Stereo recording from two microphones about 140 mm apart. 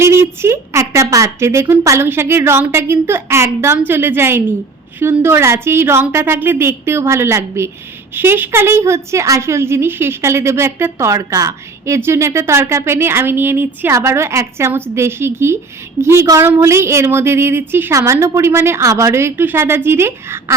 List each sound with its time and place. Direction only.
0.0 s a woman's voice: 20° right (ahead or behind)